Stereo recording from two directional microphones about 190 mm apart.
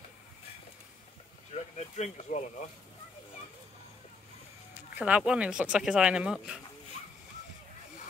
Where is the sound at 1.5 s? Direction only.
35° left (ahead or behind).